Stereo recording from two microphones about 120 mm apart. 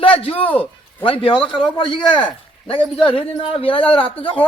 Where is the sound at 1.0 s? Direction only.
45° left (ahead or behind).